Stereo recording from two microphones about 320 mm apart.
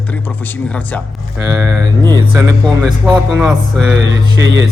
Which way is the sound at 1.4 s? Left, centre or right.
Centre.